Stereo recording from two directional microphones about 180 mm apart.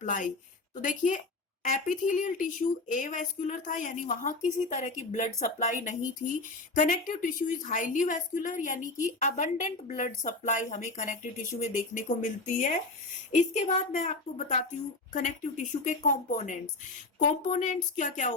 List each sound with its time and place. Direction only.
0.0 s speech: 45° left (ahead or behind)